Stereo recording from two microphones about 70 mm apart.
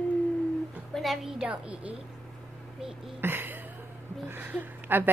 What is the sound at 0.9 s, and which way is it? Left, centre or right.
Speech, centre.